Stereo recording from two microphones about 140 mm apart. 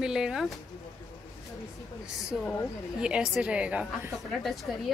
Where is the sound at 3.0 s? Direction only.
5° right (ahead or behind).